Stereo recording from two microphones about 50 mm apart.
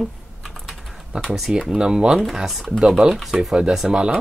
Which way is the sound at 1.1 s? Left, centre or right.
Centre.